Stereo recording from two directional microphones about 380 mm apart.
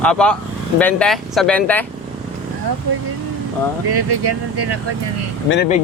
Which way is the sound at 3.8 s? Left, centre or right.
Right.